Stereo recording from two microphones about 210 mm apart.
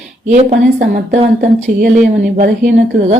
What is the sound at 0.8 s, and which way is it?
Speech, 35° right (ahead or behind).